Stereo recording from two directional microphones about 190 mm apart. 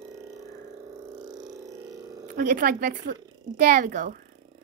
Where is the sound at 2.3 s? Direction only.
45° right (ahead or behind).